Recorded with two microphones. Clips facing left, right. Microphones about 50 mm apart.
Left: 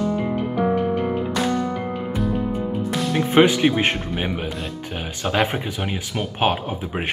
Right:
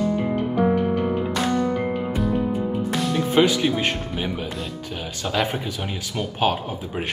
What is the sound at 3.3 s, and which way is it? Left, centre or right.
Speech, left.